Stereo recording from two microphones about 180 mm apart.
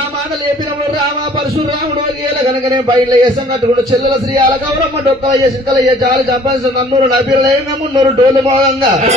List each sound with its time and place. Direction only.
2.7 s a man's voice: 25° right (ahead or behind)
5.7 s a man's voice: 20° right (ahead or behind)